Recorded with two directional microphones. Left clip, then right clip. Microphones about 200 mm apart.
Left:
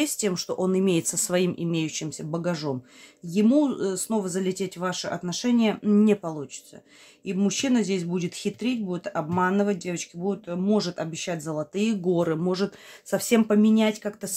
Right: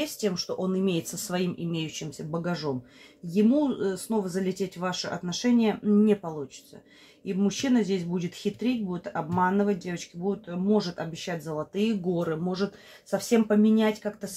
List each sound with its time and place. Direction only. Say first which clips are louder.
0.0 s speech: left 3 dB; 35° left (ahead or behind)
7.3 s speech: left 1 dB; 30° left (ahead or behind)